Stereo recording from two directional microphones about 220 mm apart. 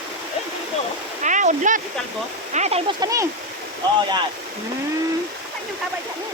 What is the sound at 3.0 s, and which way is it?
Speech, 15° right (ahead or behind).